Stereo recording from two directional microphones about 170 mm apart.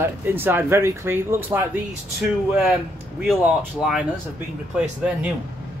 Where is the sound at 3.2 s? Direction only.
Centre (ahead or behind).